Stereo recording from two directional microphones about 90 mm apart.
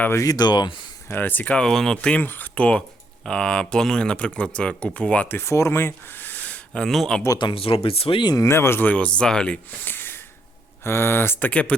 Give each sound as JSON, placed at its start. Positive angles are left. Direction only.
{"t": 0.2, "sound": "speech", "side_deg": 45}
{"t": 1.0, "sound": "speech", "side_deg": 20}
{"t": 1.6, "sound": "speech", "side_deg": 5}
{"t": 2.2, "sound": "speech", "side_deg": 20}
{"t": 5.4, "sound": "speech", "side_deg": 30}
{"t": 6.8, "sound": "speech", "side_deg": 5}
{"t": 7.5, "sound": "speech", "side_deg": 90}
{"t": 8.4, "sound": "speech", "side_deg": 30}
{"t": 9.6, "sound": "a sound", "side_deg": 20}
{"t": 10.8, "sound": "speech", "side_deg": 25}